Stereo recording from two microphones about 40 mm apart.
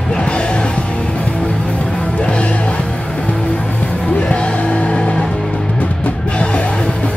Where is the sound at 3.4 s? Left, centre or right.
Left.